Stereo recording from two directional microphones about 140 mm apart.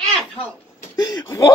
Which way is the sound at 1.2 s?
20° left (ahead or behind).